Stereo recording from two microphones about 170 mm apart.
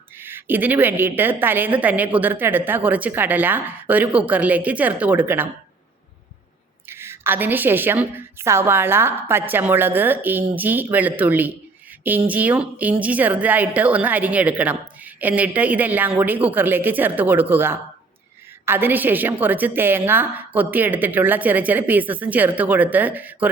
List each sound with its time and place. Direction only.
0.2 s a woman's voice: 10° right (ahead or behind)
6.8 s a woman's voice: 15° right (ahead or behind)